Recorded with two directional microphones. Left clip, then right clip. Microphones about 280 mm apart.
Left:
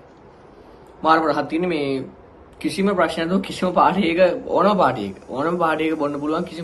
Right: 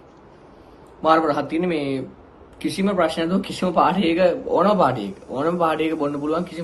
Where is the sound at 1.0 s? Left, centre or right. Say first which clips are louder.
Left 1 dB; centre.